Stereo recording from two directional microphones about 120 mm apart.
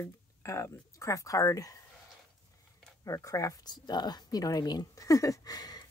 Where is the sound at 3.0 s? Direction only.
25° left (ahead or behind).